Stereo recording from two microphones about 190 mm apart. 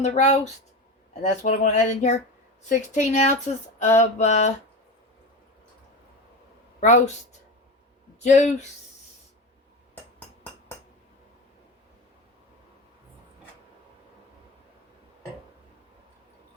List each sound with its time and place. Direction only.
0.0 s speech: 35° left (ahead or behind)
6.7 s speech: 40° left (ahead or behind)
8.2 s speech: 40° left (ahead or behind)